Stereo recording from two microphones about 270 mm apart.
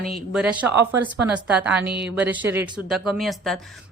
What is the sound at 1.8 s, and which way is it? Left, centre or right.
Speech, right.